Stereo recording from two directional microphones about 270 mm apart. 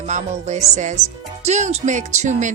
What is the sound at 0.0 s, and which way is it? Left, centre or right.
A woman's voice, right.